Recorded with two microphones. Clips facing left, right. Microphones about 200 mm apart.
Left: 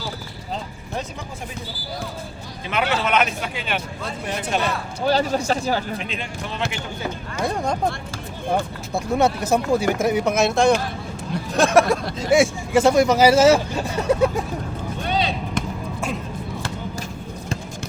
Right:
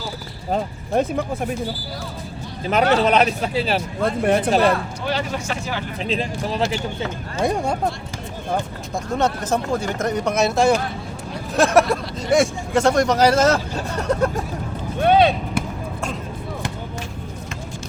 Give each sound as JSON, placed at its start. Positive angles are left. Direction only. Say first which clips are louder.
{"t": 0.5, "sound": "speech", "louder": "right 9 dB", "side_deg": -55}
{"t": 2.6, "sound": "speech", "louder": "right 6 dB", "side_deg": -40}
{"t": 4.0, "sound": "speech", "louder": "right 10 dB", "side_deg": -55}
{"t": 5.0, "sound": "speech", "louder": "left 6 dB", "side_deg": 35}
{"t": 6.0, "sound": "speech", "louder": "right 6 dB", "side_deg": -35}
{"t": 7.0, "sound": "speech", "louder": "right 1 dB", "side_deg": -20}
{"t": 9.0, "sound": "speech", "louder": "left 2 dB", "side_deg": 10}
{"t": 15.0, "sound": "a sound", "louder": "right 9 dB", "side_deg": -55}
{"t": 15.6, "sound": "basketball bounce", "louder": "right 1 dB", "side_deg": -10}